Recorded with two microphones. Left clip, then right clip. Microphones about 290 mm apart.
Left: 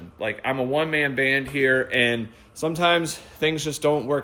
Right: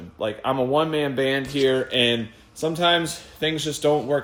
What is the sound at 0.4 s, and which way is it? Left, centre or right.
A man's voice, centre.